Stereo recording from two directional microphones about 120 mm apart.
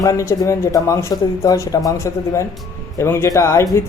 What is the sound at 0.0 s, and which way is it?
Speech, 25° left (ahead or behind).